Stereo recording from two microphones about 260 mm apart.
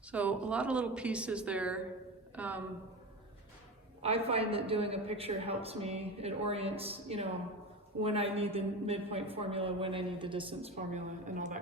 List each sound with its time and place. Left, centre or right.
0.1 s a woman's voice: centre
4.0 s a woman's voice: right